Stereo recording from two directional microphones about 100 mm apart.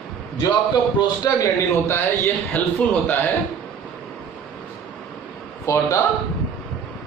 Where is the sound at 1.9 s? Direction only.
20° left (ahead or behind).